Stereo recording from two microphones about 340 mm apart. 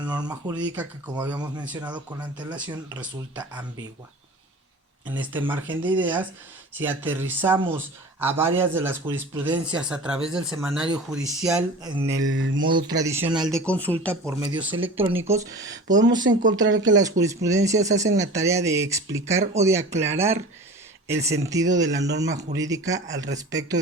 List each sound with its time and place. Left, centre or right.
0.0 s speech: centre
5.0 s speech: centre
12.3 s mantra: right
12.6 s speech: centre
13.4 s speech: centre
14.1 s speech: centre
16.3 s mantra: right
17.0 s speech: centre